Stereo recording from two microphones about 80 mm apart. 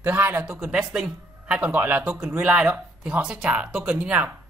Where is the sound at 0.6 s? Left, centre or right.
Centre.